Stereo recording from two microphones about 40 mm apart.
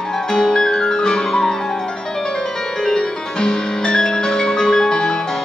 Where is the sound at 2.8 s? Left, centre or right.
Centre.